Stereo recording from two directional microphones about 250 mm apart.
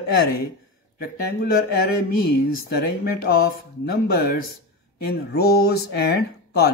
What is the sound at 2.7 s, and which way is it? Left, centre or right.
Speech, left.